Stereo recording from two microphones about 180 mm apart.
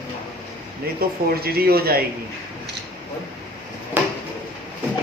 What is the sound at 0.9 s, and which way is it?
Speech, 60° right (ahead or behind).